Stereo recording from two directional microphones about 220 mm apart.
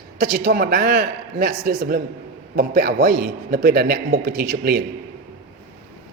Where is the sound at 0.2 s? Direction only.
40° right (ahead or behind).